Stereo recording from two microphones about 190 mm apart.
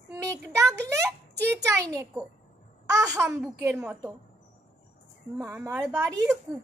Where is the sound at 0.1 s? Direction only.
15° right (ahead or behind).